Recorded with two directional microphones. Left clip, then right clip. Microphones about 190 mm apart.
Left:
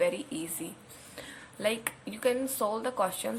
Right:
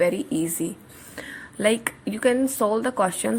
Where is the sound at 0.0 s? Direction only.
30° right (ahead or behind).